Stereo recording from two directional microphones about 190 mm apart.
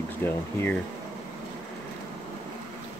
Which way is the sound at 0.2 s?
10° left (ahead or behind).